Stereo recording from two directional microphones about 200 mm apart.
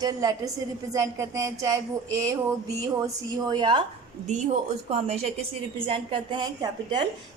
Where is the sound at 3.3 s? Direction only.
25° right (ahead or behind).